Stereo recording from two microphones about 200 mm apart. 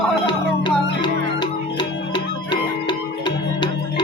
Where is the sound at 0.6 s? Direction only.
25° left (ahead or behind).